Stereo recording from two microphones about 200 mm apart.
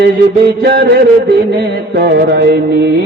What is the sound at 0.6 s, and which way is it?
Music, 55° right (ahead or behind).